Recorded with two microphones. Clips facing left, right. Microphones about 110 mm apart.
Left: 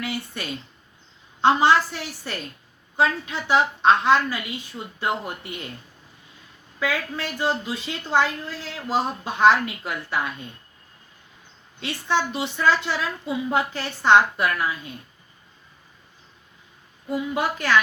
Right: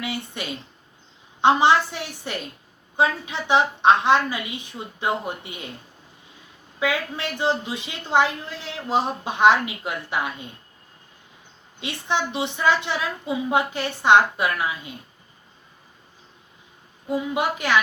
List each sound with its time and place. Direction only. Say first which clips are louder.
0.0 s a woman's voice: even; 20° right (ahead or behind)
6.7 s a woman's voice: right 1 dB; 20° right (ahead or behind)
11.8 s a woman's voice: left 1 dB; 20° right (ahead or behind)
17.1 s a woman's voice: right 1 dB; 20° right (ahead or behind)